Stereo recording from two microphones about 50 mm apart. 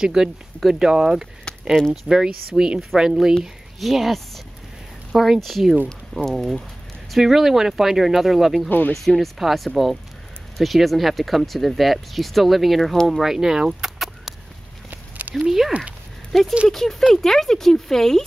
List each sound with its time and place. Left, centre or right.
0.0 s speech: centre
3.8 s speech: centre
6.1 s speech: centre
7.1 s speech: centre
8.6 s speech: left
9.0 s speech: centre
13.8 s chicken: centre
14.9 s a sound: right
15.3 s speech: centre
16.3 s speech: centre